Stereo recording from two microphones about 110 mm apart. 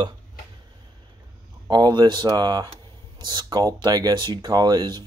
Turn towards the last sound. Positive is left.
turn(degrees=-40)  # may be behind; listen again after turning